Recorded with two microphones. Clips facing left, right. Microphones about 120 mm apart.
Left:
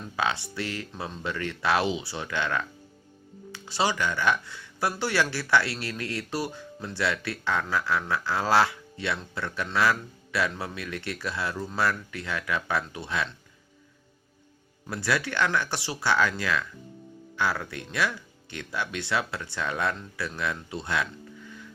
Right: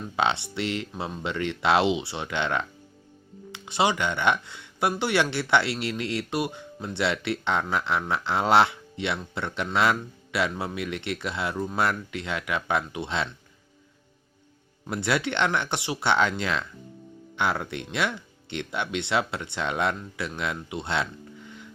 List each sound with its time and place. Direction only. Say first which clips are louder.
0.2 s speech: right 3 dB; 25° right (ahead or behind)
14.8 s speech: right 2 dB; 20° right (ahead or behind)